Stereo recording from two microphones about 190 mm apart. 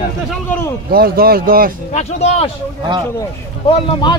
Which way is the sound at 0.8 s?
50° right (ahead or behind).